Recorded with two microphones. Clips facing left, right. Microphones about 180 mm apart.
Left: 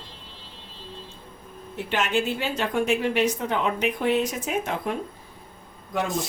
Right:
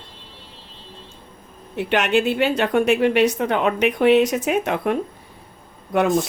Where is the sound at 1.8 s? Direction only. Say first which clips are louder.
Right 6 dB; 70° right (ahead or behind).